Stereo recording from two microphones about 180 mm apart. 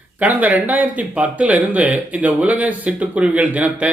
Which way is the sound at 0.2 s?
10° right (ahead or behind).